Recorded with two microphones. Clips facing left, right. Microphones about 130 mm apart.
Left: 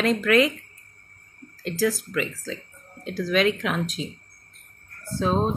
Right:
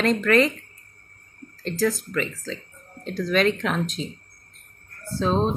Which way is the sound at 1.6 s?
5° left (ahead or behind).